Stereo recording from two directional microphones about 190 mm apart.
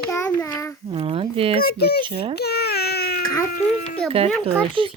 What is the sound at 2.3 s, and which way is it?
Baby cry, 55° left (ahead or behind).